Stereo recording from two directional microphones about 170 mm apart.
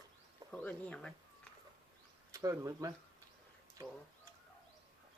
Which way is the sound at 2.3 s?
20° right (ahead or behind).